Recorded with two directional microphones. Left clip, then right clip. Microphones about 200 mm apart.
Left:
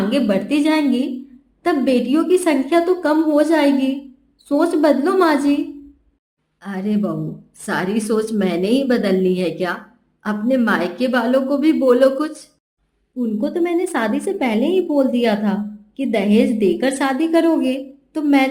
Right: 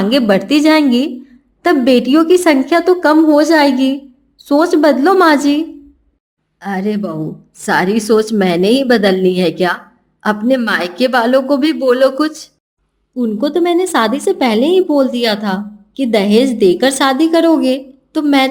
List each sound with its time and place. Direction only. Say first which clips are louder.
0.1 s a woman's voice: right 9 dB; 40° right (ahead or behind)
6.6 s a woman's voice: right 5 dB; 30° right (ahead or behind)